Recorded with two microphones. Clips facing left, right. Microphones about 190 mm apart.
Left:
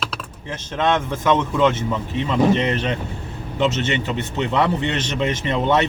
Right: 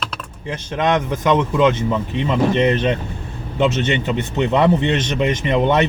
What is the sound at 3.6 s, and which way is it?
Speech, 20° right (ahead or behind).